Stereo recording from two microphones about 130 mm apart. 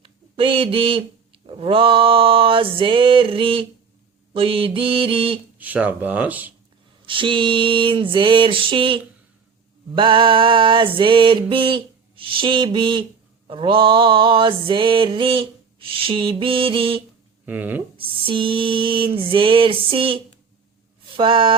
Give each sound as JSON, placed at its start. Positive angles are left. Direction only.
{"t": 0.0, "sound": "speech", "side_deg": -45}
{"t": 1.5, "sound": "a sound", "side_deg": -45}
{"t": 5.5, "sound": "speech", "side_deg": -10}
{"t": 7.0, "sound": "mantra", "side_deg": -40}
{"t": 17.4, "sound": "speech", "side_deg": -15}
{"t": 17.9, "sound": "mantra", "side_deg": -45}